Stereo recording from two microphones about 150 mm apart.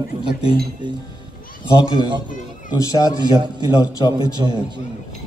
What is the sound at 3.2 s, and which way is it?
A man's voice, 30° right (ahead or behind).